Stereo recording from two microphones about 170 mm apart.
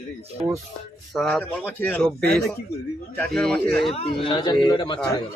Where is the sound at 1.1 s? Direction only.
5° left (ahead or behind).